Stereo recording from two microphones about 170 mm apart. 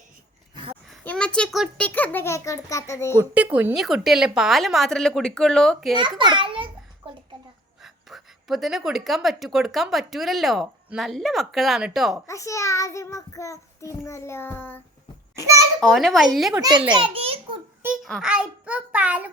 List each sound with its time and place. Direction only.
0.5 s a sound: 30° right (ahead or behind)
1.0 s a child's voice: 5° left (ahead or behind)
1.8 s a child's voice: 10° left (ahead or behind)
3.2 s a child's voice: 10° right (ahead or behind)
6.0 s a child's voice: 30° right (ahead or behind)
8.1 s speech: centre (ahead or behind)
12.3 s a child's voice: 20° left (ahead or behind)
15.8 s speech: centre (ahead or behind)
16.6 s a child's voice: 25° right (ahead or behind)
17.8 s a child's voice: centre (ahead or behind)